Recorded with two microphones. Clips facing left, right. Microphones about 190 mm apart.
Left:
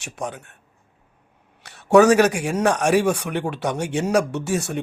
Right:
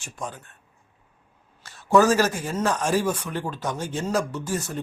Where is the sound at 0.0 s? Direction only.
70° left (ahead or behind).